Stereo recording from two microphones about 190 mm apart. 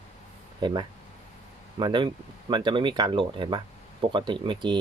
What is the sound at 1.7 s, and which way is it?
Speech, 25° right (ahead or behind).